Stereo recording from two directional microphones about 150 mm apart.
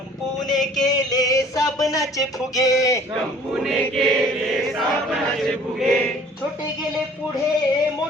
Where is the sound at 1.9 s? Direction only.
25° left (ahead or behind).